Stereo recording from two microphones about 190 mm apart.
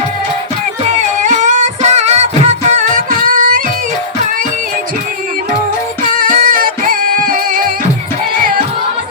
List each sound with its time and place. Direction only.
0.9 s music: 40° right (ahead or behind)
6.1 s music: 45° right (ahead or behind)